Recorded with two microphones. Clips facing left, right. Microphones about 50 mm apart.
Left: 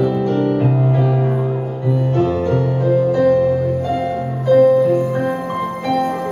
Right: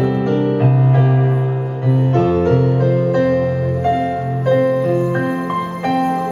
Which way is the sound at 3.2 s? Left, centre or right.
Right.